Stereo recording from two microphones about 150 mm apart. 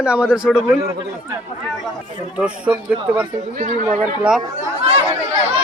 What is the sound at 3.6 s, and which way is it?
Speech, 55° right (ahead or behind).